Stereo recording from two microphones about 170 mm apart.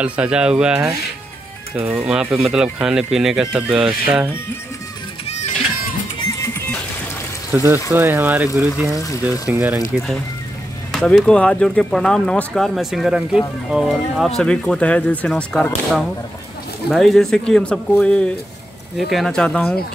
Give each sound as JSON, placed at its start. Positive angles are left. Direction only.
{"t": 0.0, "sound": "speech", "side_deg": -10}
{"t": 5.2, "sound": "music", "side_deg": 40}
{"t": 6.4, "sound": "music", "side_deg": 15}
{"t": 7.5, "sound": "speech", "side_deg": -15}